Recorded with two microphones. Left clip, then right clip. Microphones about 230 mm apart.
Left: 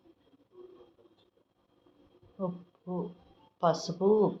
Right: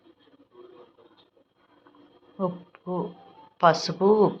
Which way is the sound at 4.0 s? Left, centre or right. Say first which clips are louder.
Right 6 dB; right.